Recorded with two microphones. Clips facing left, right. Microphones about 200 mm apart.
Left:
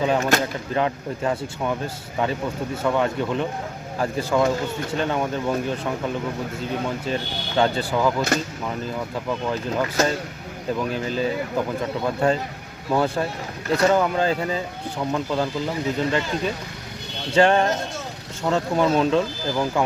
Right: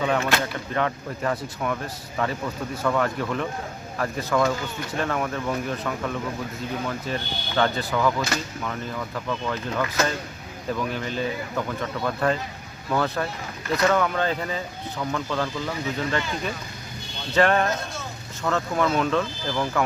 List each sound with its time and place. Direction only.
0.0 s speech: 30° left (ahead or behind)
8.3 s speech: 50° left (ahead or behind)
8.6 s speech: 30° left (ahead or behind)
17.3 s speech: 30° left (ahead or behind)